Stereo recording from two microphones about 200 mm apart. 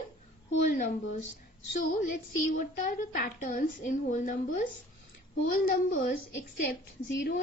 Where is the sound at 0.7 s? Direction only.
40° left (ahead or behind).